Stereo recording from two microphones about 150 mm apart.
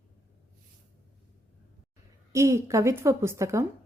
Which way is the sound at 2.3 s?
20° right (ahead or behind).